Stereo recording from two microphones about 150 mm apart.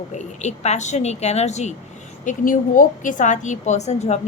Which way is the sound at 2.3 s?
60° left (ahead or behind).